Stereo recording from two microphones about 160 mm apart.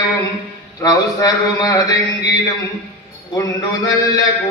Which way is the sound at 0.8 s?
20° left (ahead or behind).